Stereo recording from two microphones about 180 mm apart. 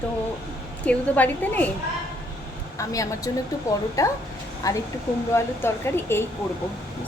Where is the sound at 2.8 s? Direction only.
20° left (ahead or behind).